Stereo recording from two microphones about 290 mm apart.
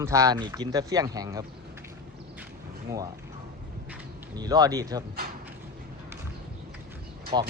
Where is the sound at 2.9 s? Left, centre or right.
Centre.